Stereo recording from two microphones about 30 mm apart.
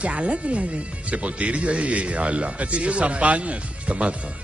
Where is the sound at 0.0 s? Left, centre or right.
Right.